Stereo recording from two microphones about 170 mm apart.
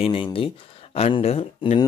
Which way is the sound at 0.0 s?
30° left (ahead or behind).